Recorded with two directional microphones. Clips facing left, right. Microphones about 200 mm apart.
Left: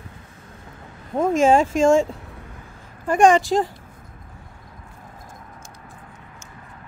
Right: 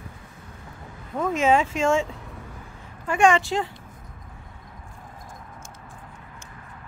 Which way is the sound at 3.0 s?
45° left (ahead or behind).